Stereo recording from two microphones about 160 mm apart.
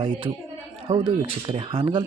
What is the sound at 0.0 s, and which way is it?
Speech, 30° right (ahead or behind).